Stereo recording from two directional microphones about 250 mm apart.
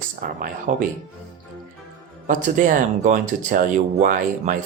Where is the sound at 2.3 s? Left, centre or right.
Right.